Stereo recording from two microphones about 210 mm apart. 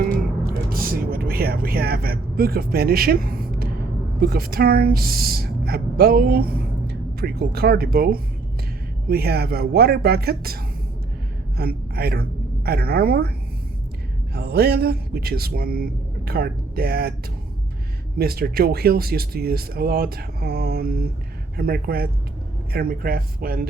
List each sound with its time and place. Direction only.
0.0 s a sound: 45° right (ahead or behind)
4.2 s a woman's voice: 45° right (ahead or behind)
14.3 s speech: 50° right (ahead or behind)
18.2 s speech: 45° right (ahead or behind)